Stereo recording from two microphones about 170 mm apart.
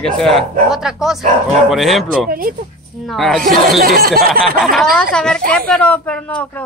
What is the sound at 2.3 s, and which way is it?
Speech, 55° right (ahead or behind).